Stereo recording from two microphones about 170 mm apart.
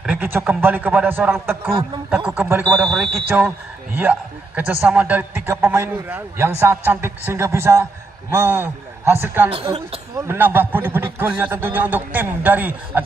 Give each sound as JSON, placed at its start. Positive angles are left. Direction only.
{"t": 0.0, "sound": "a man's voice", "side_deg": -10}
{"t": 9.5, "sound": "speech", "side_deg": -35}
{"t": 10.2, "sound": "a man's voice", "side_deg": -10}